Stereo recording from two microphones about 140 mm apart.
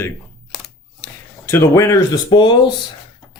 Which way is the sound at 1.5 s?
20° left (ahead or behind).